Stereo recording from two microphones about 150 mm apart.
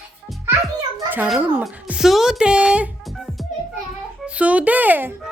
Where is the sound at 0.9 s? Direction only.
15° right (ahead or behind).